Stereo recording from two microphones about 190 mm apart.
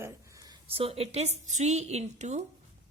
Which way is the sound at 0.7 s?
30° right (ahead or behind).